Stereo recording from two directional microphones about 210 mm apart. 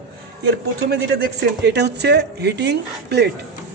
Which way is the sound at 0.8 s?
55° right (ahead or behind).